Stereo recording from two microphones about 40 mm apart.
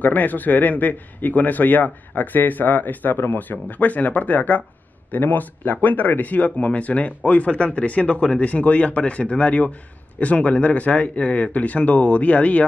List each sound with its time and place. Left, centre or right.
0.0 s a man's voice: left